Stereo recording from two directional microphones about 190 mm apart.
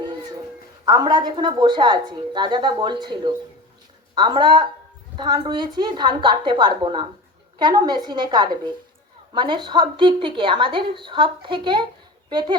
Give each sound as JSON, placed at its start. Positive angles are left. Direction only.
{"t": 0.9, "sound": "a woman's voice", "side_deg": -20}